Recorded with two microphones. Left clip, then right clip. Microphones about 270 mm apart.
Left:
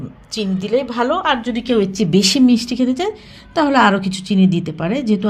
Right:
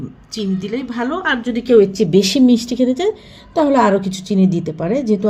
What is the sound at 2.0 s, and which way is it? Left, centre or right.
Speech, left.